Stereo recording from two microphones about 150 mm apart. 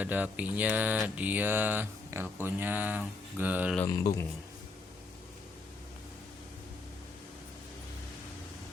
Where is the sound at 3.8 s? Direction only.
25° left (ahead or behind).